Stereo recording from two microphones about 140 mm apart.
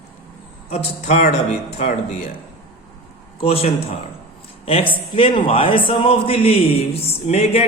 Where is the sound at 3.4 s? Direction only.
45° left (ahead or behind).